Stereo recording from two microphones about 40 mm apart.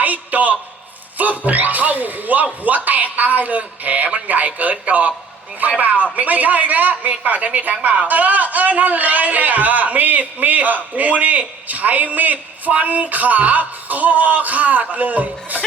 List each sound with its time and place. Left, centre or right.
0.0 s a man's voice: right